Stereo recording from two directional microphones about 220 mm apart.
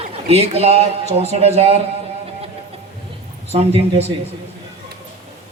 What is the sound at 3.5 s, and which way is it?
Speech, 25° right (ahead or behind).